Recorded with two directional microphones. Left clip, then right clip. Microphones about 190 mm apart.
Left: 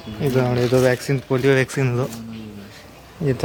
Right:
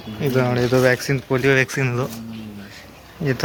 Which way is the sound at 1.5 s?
20° left (ahead or behind).